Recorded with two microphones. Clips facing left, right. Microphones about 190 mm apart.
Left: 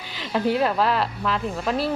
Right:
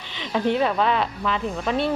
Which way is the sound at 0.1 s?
5° left (ahead or behind).